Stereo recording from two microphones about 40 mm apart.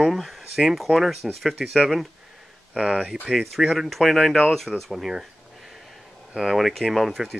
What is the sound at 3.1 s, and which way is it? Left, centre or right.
Speech, centre.